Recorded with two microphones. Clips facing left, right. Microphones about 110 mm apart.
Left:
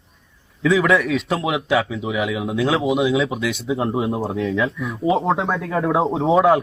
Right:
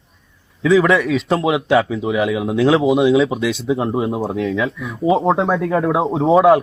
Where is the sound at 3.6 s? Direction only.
15° right (ahead or behind).